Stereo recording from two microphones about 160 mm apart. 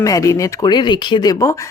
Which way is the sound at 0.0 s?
20° left (ahead or behind).